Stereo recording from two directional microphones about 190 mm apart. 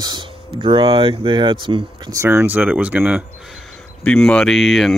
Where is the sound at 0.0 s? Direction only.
20° right (ahead or behind).